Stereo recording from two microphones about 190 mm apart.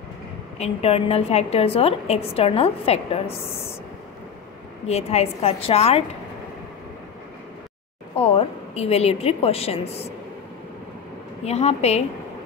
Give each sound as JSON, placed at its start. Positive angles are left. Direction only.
{"t": 0.6, "sound": "a woman's voice", "side_deg": 30}
{"t": 4.8, "sound": "a woman's voice", "side_deg": 35}
{"t": 8.2, "sound": "a woman's voice", "side_deg": 30}
{"t": 11.4, "sound": "a woman's voice", "side_deg": 35}